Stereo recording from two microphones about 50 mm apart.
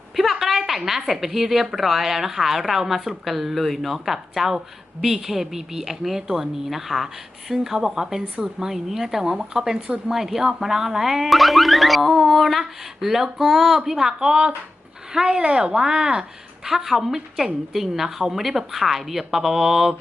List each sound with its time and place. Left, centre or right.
0.2 s a woman's voice: centre